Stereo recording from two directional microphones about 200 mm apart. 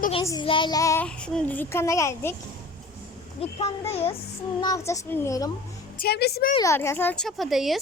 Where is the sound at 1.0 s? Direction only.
5° left (ahead or behind).